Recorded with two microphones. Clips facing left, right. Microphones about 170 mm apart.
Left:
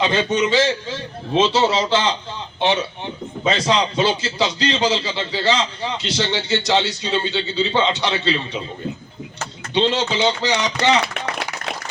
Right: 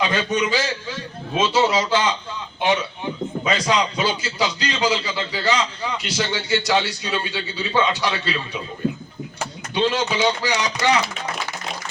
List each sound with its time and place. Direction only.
0.0 s a man's voice: 25° left (ahead or behind)
3.4 s a man's voice: 25° left (ahead or behind)
9.7 s a man's voice: 25° left (ahead or behind)